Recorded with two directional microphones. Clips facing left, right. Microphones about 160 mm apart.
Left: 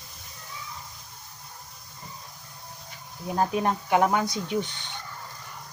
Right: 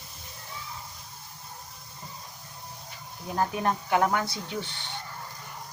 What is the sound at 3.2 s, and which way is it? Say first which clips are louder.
Speech: left 2 dB; 20° left (ahead or behind).